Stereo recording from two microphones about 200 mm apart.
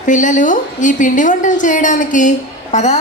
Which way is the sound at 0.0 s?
40° left (ahead or behind).